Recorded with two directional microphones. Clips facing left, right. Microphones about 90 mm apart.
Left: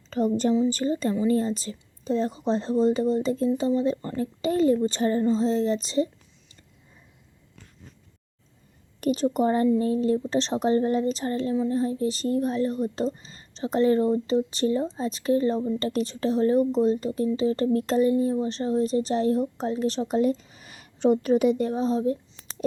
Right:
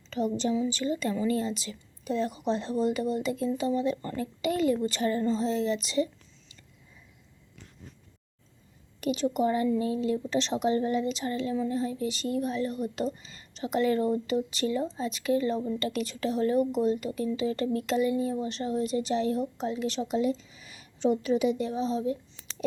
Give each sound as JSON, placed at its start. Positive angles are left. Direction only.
{"t": 0.1, "sound": "a woman's voice", "side_deg": 45}
{"t": 9.0, "sound": "speech", "side_deg": 40}